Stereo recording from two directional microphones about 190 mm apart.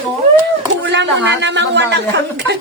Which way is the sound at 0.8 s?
70° right (ahead or behind).